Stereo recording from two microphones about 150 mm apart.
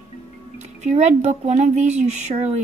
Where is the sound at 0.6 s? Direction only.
50° right (ahead or behind).